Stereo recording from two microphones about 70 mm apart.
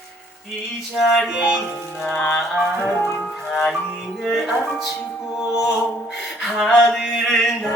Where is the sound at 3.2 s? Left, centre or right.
Centre.